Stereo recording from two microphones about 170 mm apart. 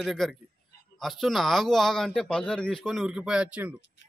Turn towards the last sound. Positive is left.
turn(degrees=-5)  # may be behind; listen again after turning